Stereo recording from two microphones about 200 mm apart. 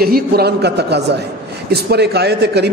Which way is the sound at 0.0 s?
50° right (ahead or behind).